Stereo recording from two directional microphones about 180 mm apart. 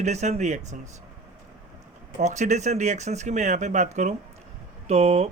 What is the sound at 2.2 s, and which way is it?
Speech, 40° right (ahead or behind).